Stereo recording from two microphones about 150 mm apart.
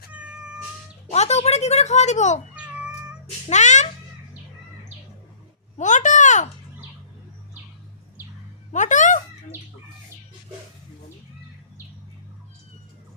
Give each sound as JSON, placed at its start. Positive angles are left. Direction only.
{"t": 0.1, "sound": "cat", "side_deg": -10}
{"t": 1.1, "sound": "speech", "side_deg": 45}
{"t": 2.6, "sound": "cat", "side_deg": -5}
{"t": 3.5, "sound": "speech", "side_deg": 50}
{"t": 5.7, "sound": "a sound", "side_deg": 55}
{"t": 8.7, "sound": "a sound", "side_deg": 55}